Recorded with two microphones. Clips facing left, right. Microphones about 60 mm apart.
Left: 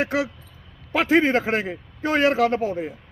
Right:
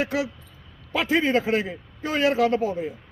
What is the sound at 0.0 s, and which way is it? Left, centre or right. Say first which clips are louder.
A man's voice: left 2 dB; left.